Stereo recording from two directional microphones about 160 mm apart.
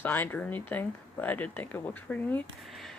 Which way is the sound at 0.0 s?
10° left (ahead or behind).